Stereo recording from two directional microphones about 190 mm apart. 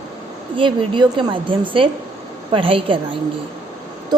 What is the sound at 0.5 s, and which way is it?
A woman's voice, 25° right (ahead or behind).